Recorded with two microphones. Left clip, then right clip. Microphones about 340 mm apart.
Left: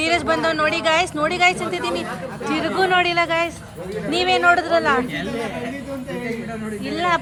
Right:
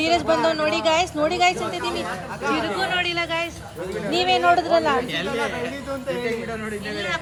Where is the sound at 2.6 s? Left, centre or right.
Centre.